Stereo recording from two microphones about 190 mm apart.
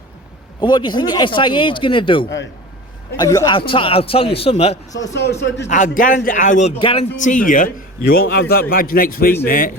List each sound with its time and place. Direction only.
0.6 s speech: 25° left (ahead or behind)
5.6 s a man's voice: 40° left (ahead or behind)
6.7 s speech: 30° left (ahead or behind)
7.2 s a man's voice: 40° left (ahead or behind)